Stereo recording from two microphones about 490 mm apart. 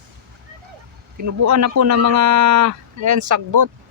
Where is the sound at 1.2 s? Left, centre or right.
Right.